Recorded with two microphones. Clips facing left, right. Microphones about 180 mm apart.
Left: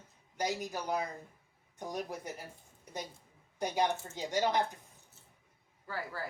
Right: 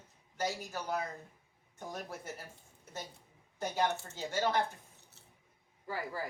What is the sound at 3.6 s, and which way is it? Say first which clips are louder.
A woman's voice: left 2 dB; 15° left (ahead or behind).